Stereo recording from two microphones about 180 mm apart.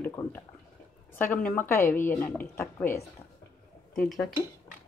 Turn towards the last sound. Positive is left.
turn(degrees=0)  # may be behind; listen again after turning